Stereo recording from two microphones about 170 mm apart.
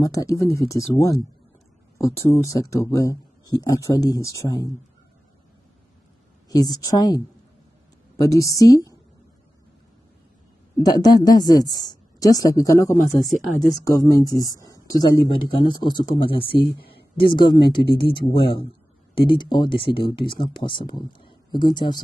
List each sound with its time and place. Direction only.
0.0 s speech: 20° left (ahead or behind)
6.5 s speech: 20° left (ahead or behind)
10.8 s speech: 20° left (ahead or behind)
13.2 s speech: centre (ahead or behind)
13.6 s a woman's voice: 20° left (ahead or behind)
19.1 s speech: 30° left (ahead or behind)